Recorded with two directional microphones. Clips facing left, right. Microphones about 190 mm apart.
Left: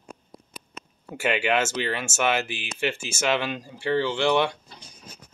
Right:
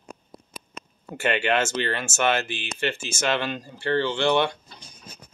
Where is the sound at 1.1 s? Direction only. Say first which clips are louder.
Even; 5° left (ahead or behind).